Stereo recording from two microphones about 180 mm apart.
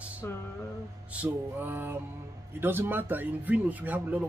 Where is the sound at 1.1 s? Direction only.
10° right (ahead or behind).